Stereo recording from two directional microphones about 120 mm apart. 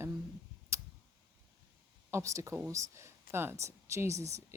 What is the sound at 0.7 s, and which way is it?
Tick, 25° right (ahead or behind).